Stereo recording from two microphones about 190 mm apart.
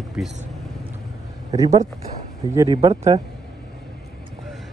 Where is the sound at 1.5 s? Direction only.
20° right (ahead or behind).